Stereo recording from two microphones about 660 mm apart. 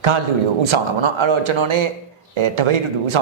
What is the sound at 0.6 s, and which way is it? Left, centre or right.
Speech, right.